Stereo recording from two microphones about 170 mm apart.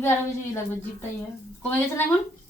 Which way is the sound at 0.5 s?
15° left (ahead or behind).